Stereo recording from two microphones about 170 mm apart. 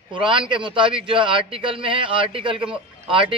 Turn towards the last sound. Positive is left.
turn(degrees=-30)  # may be behind; listen again after turning